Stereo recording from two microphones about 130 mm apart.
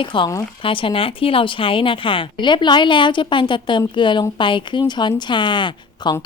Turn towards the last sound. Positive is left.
turn(degrees=35)  # may be behind; listen again after turning